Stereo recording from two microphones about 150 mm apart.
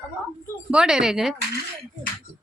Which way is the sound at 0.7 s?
5° right (ahead or behind).